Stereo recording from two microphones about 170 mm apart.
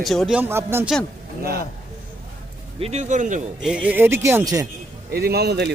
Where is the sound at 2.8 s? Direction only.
40° right (ahead or behind).